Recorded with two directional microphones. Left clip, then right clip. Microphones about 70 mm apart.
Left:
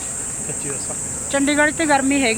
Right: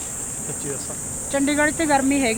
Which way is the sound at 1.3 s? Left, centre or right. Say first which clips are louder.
Left 3 dB; centre.